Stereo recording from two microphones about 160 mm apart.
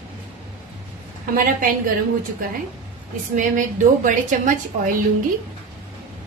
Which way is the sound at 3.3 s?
55° right (ahead or behind).